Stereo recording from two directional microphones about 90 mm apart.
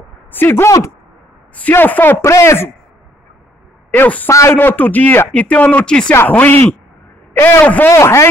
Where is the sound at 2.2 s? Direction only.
30° left (ahead or behind).